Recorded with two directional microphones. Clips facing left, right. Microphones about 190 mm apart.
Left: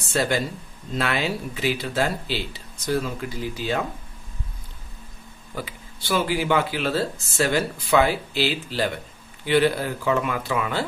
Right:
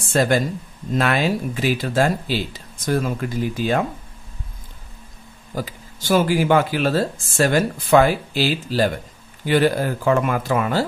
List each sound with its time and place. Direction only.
0.0 s speech: 50° right (ahead or behind)
5.5 s speech: 40° right (ahead or behind)